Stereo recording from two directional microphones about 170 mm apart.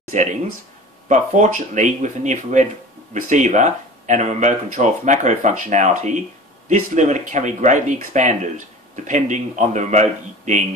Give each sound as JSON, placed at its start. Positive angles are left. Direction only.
{"t": 0.1, "sound": "speech", "side_deg": -45}